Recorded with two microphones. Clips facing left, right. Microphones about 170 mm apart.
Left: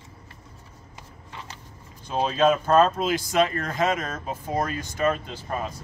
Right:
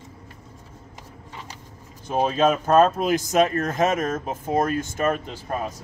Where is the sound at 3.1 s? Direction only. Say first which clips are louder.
Right 3 dB; 45° right (ahead or behind).